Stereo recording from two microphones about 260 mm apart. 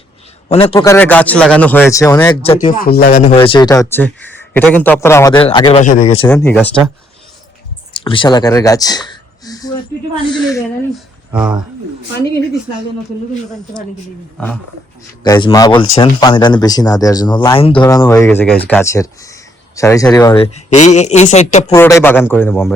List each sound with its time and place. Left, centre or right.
0.4 s speech: left
2.3 s speech: left
6.2 s speech: centre
7.9 s speech: centre
14.3 s speech: centre
15.2 s speech: centre
20.7 s speech: left
21.7 s speech: centre